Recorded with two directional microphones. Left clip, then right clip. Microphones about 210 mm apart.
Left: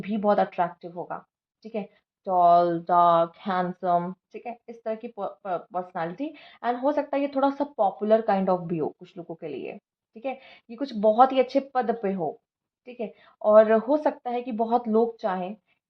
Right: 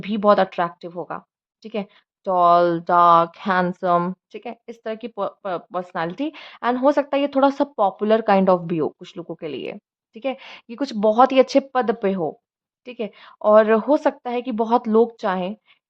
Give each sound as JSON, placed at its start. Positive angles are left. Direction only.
{"t": 0.0, "sound": "speech", "side_deg": -35}